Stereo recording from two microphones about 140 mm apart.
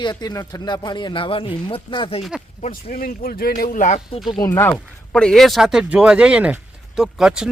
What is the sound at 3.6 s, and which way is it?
Speech, 75° left (ahead or behind).